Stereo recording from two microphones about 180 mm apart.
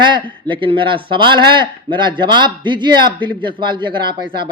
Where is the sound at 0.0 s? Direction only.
25° right (ahead or behind).